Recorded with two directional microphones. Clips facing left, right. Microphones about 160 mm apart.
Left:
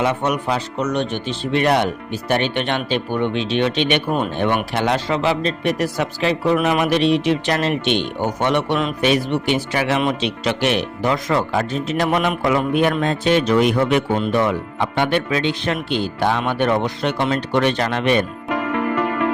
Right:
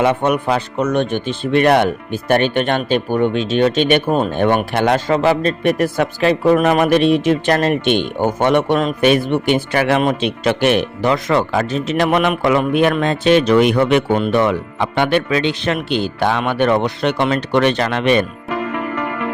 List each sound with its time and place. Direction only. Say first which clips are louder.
0.0 s speech: right 4 dB; 55° right (ahead or behind)
11.0 s a man's voice: right 2 dB; 75° right (ahead or behind)
14.9 s speech: right 4 dB; 85° right